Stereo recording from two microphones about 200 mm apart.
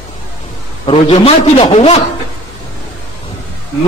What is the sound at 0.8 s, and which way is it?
Speech, 25° left (ahead or behind).